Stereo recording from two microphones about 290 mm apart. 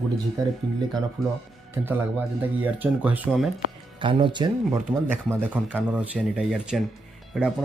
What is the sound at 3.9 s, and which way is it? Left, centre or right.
Speech, centre.